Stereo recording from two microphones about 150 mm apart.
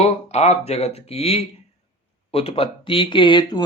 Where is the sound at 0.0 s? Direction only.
45° left (ahead or behind).